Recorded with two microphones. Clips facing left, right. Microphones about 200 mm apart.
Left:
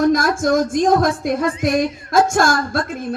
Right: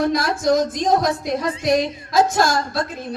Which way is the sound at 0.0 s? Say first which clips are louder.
Left 4 dB; 45° left (ahead or behind).